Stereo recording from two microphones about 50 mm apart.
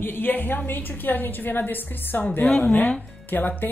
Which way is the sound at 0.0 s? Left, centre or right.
Left.